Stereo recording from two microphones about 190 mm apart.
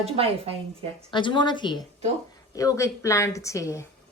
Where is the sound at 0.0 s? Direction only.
30° right (ahead or behind).